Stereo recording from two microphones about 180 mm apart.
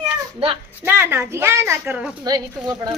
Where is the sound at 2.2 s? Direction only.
20° right (ahead or behind).